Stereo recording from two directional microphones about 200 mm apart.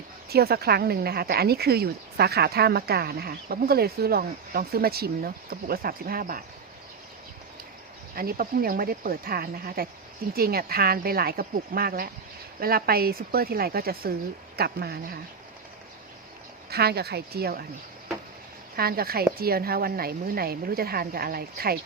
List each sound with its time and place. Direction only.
0.3 s speech: 50° right (ahead or behind)
8.1 s speech: 45° right (ahead or behind)
16.6 s speech: 50° right (ahead or behind)
18.8 s speech: 50° right (ahead or behind)